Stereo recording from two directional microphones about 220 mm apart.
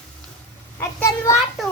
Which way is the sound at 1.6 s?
Centre (ahead or behind).